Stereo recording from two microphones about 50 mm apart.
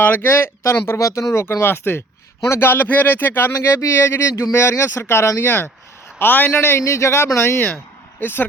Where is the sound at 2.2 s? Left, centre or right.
Left.